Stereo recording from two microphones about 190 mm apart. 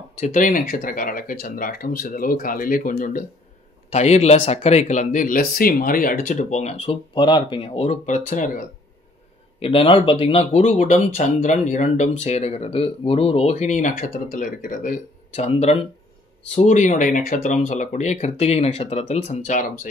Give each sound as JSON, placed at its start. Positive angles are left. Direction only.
{"t": 0.2, "sound": "speech", "side_deg": 45}
{"t": 9.6, "sound": "speech", "side_deg": 30}